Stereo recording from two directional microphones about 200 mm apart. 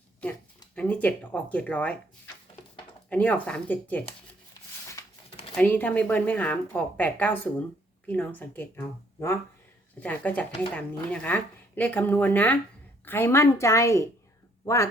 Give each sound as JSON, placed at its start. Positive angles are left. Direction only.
{"t": 0.8, "sound": "speech", "side_deg": 5}
{"t": 5.5, "sound": "speech", "side_deg": 10}